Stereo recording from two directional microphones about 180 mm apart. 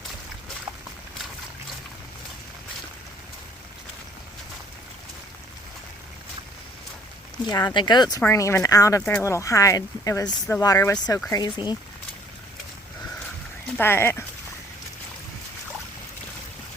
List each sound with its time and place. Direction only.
7.4 s speech: 25° left (ahead or behind)
13.7 s speech: 15° left (ahead or behind)